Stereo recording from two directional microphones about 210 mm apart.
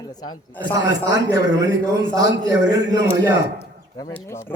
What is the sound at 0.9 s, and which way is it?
A man's voice, 15° right (ahead or behind).